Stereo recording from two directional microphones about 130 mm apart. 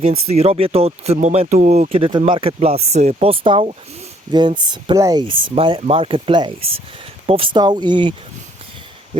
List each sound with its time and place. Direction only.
0.3 s speech: 50° right (ahead or behind)
1.9 s speech: 40° right (ahead or behind)
5.2 s speech: 40° right (ahead or behind)